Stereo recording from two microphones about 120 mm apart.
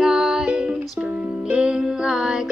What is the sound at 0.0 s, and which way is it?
Music, 5° right (ahead or behind).